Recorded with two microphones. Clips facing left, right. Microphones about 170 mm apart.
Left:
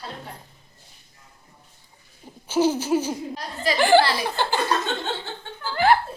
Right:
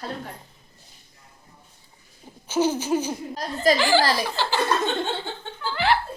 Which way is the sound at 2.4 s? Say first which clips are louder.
Left 2 dB; 10° left (ahead or behind).